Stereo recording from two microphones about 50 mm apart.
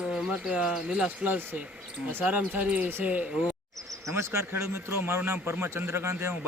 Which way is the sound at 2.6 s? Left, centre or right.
Right.